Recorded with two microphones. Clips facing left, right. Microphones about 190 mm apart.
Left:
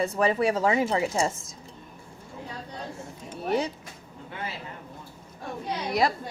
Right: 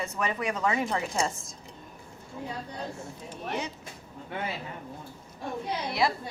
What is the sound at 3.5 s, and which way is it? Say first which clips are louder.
Speech: left 7 dB; 35° left (ahead or behind).